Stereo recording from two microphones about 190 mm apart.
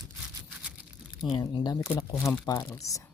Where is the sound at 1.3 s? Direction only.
25° left (ahead or behind).